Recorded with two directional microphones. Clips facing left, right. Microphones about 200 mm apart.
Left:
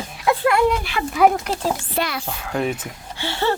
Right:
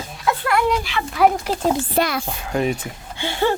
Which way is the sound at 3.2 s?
15° right (ahead or behind).